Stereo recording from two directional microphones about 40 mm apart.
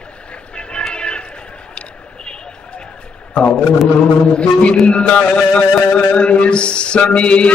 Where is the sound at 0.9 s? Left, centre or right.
Left.